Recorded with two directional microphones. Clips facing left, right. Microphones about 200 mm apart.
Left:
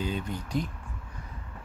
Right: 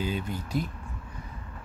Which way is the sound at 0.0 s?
5° right (ahead or behind).